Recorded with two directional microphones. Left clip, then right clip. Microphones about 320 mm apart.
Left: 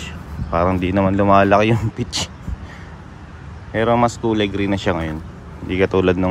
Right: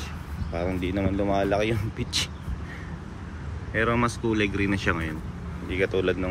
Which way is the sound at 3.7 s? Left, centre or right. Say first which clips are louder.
Left 8 dB; centre.